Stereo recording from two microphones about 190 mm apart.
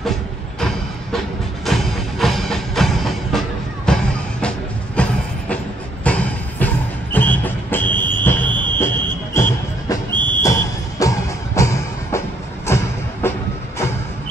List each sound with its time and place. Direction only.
1.7 s music: centre (ahead or behind)
6.0 s music: 10° left (ahead or behind)
8.1 s a sound: 10° left (ahead or behind)
8.7 s music: 15° left (ahead or behind)
10.1 s a sound: 25° right (ahead or behind)
10.4 s music: 15° left (ahead or behind)